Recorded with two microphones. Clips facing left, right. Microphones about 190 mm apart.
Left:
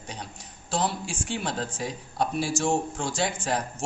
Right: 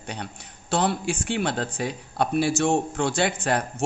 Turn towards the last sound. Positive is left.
turn(degrees=-65)  # may be behind; listen again after turning